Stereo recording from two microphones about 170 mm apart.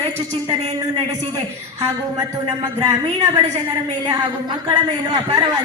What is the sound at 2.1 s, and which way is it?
A woman's voice, 25° right (ahead or behind).